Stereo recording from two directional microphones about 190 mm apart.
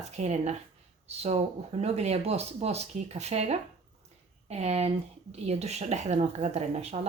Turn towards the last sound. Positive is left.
turn(degrees=-35)  # may be behind; listen again after turning